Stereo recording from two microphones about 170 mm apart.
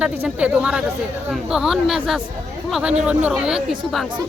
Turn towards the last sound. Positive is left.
turn(degrees=0)  # may be behind; listen again after turning